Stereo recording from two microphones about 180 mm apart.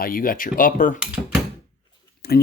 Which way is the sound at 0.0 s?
50° left (ahead or behind).